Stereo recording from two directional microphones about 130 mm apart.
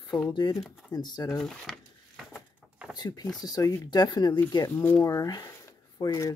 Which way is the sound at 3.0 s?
30° left (ahead or behind).